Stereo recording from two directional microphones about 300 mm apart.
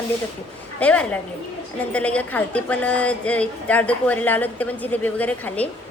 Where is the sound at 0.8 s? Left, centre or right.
Centre.